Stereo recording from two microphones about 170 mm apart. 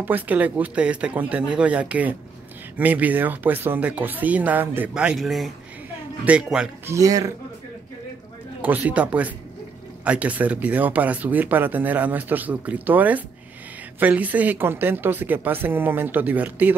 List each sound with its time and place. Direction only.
0.0 s speech: 10° right (ahead or behind)
7.0 s speech: 20° right (ahead or behind)
8.6 s speech: 10° right (ahead or behind)